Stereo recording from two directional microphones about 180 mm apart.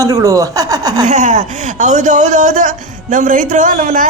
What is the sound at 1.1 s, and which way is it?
Speech, 45° right (ahead or behind).